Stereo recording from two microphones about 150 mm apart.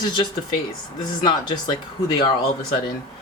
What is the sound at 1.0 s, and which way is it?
Speech, 30° left (ahead or behind).